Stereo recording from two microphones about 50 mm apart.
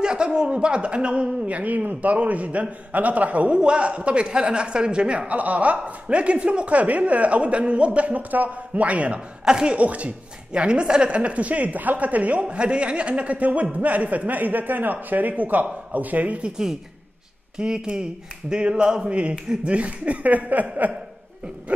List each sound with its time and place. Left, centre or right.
0.0 s a woman's voice: centre
9.4 s a woman's voice: centre
17.6 s a woman's voice: centre; by 20.6 s right
21.7 s a woman's voice: right